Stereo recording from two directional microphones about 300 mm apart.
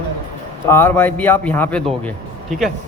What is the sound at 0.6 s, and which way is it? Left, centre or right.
A man's voice, centre.